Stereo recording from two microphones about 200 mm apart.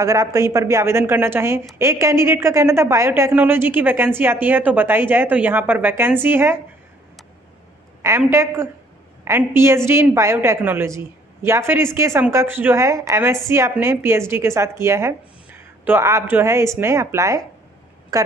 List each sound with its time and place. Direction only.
0.0 s a woman's voice: 15° right (ahead or behind)
8.2 s a woman's voice: 10° right (ahead or behind)